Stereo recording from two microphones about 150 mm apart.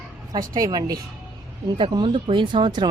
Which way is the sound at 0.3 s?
25° right (ahead or behind).